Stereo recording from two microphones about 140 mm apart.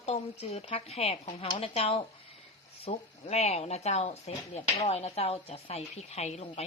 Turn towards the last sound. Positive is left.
turn(degrees=45)  # may be behind; listen again after turning